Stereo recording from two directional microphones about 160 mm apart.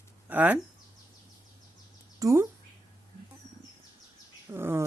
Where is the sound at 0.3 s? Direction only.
10° right (ahead or behind).